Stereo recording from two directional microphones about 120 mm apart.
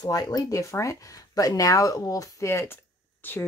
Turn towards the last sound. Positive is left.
turn(degrees=20)  # may be behind; listen again after turning